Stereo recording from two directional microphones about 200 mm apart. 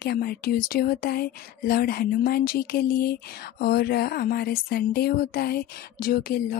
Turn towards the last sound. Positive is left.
turn(degrees=50)  # may be behind; listen again after turning